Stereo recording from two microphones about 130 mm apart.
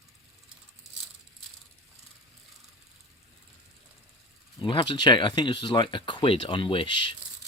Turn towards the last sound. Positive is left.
turn(degrees=40)  # may be behind; listen again after turning